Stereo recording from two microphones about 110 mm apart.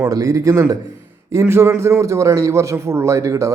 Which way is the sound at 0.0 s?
35° right (ahead or behind).